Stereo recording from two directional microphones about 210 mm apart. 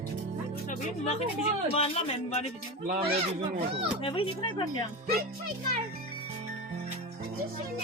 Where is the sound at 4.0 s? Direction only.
25° left (ahead or behind).